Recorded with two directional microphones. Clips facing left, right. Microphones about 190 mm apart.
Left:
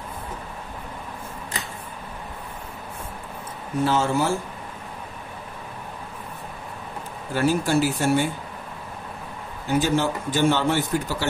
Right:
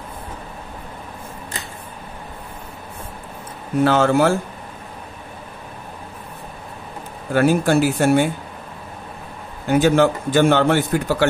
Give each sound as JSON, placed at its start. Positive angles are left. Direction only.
{"t": 3.8, "sound": "speech", "side_deg": -70}
{"t": 7.3, "sound": "a man's voice", "side_deg": -60}
{"t": 9.7, "sound": "a man's voice", "side_deg": -60}